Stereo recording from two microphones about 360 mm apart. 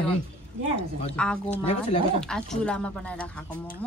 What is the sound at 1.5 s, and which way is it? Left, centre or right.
Speech, centre.